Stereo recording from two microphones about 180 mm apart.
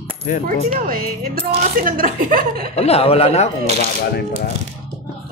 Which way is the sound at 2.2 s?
55° right (ahead or behind).